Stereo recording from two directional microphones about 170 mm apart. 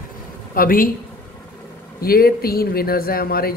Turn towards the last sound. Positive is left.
turn(degrees=60)  # may be behind; listen again after turning